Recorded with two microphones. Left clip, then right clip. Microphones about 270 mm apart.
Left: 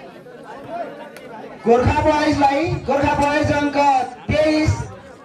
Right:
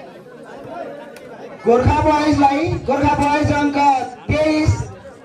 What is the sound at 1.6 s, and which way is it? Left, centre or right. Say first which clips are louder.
A man's voice: right 1 dB; left.